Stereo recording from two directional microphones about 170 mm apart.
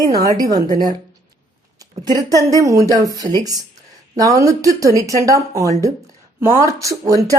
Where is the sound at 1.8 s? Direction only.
20° right (ahead or behind).